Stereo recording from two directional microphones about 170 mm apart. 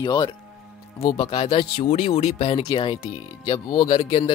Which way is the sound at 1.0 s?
35° left (ahead or behind).